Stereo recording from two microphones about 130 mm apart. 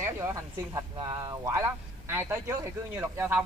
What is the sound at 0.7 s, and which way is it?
Speech, 35° right (ahead or behind).